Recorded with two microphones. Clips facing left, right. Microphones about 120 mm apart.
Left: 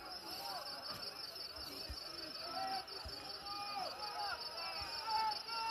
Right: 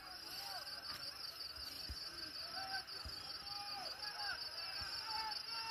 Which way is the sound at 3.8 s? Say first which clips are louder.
Left 7 dB; 45° left (ahead or behind).